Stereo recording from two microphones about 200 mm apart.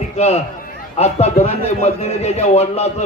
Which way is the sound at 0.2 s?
35° left (ahead or behind).